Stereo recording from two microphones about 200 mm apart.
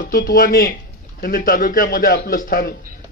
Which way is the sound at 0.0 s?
45° left (ahead or behind).